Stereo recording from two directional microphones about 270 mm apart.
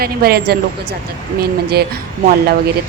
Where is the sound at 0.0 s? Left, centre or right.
Right.